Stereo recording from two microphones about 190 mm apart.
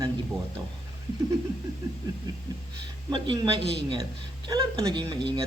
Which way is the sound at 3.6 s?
65° right (ahead or behind).